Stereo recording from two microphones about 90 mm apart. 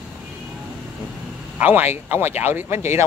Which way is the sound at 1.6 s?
20° right (ahead or behind).